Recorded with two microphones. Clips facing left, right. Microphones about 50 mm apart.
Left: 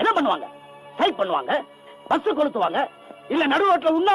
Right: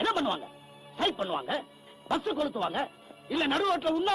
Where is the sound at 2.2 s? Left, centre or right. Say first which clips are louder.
Left 9 dB; left.